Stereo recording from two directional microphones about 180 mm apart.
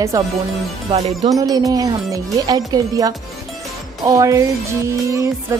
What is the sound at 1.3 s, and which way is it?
Speech, 20° right (ahead or behind).